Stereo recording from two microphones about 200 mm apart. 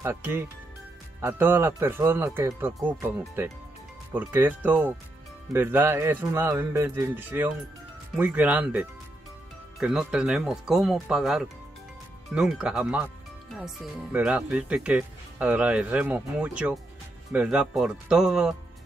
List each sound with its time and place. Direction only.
0.0 s speech: 10° right (ahead or behind)